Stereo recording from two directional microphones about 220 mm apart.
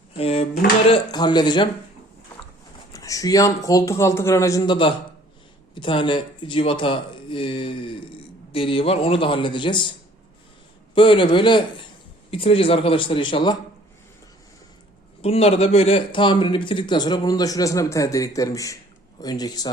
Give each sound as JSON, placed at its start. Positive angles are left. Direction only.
{"t": 0.2, "sound": "speech", "side_deg": 30}
{"t": 2.9, "sound": "a man's voice", "side_deg": 15}
{"t": 10.9, "sound": "speech", "side_deg": 25}
{"t": 15.2, "sound": "a man's voice", "side_deg": 25}